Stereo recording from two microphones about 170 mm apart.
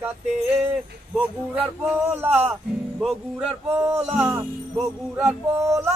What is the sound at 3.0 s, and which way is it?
Speech, centre (ahead or behind).